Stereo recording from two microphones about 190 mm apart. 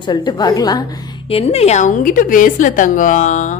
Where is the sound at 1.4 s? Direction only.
35° left (ahead or behind).